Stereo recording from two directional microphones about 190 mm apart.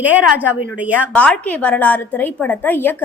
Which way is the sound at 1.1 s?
5° left (ahead or behind).